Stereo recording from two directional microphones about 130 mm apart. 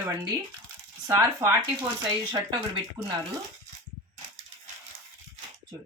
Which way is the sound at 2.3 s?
35° right (ahead or behind).